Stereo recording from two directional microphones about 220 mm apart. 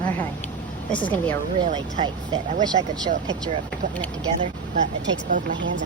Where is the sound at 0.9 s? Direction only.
5° left (ahead or behind).